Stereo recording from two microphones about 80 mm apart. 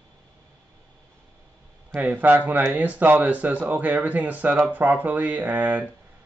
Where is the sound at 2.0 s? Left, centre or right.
Centre.